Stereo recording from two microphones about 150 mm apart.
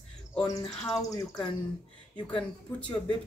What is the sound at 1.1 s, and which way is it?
Speech, 20° left (ahead or behind).